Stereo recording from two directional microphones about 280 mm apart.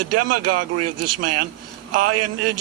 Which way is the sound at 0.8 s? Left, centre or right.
Right.